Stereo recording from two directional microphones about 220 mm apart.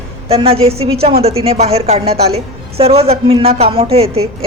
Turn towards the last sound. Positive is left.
turn(degrees=-25)  # may be behind; listen again after turning